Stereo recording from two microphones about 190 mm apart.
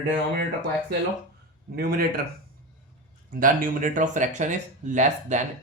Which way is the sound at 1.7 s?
55° right (ahead or behind).